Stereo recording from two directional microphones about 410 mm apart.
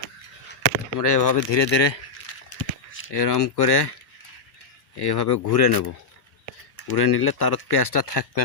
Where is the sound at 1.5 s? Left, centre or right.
Left.